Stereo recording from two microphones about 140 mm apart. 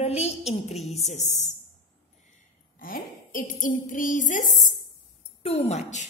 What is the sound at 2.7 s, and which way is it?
Speech, 85° left.